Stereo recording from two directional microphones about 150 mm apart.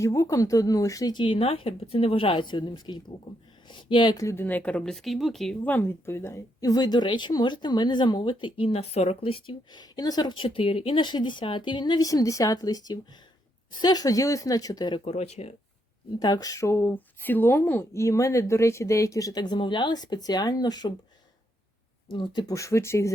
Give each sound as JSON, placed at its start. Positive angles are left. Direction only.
{"t": 0.0, "sound": "speech", "side_deg": 20}
{"t": 15.0, "sound": "speech", "side_deg": 45}
{"t": 16.2, "sound": "speech", "side_deg": 25}
{"t": 22.1, "sound": "speech", "side_deg": 30}